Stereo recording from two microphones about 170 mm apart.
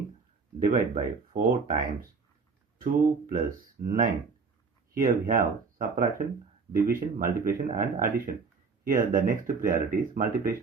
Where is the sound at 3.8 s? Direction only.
60° right (ahead or behind).